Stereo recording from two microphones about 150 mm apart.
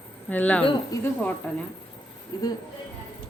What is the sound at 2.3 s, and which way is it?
Speech, 30° left (ahead or behind).